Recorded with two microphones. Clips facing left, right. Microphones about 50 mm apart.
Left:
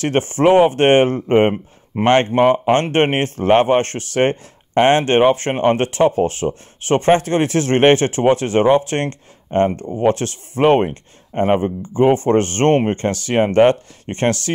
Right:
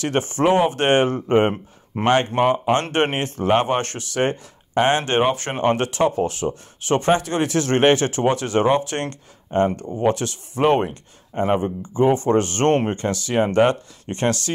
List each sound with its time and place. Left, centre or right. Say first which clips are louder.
0.0 s a man's voice: left 4 dB; left
2.0 s speech: left 4 dB; centre
2.3 s a man's voice: left 4 dB; left